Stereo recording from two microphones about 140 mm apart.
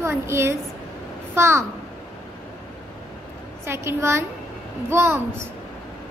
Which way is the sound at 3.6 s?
20° right (ahead or behind).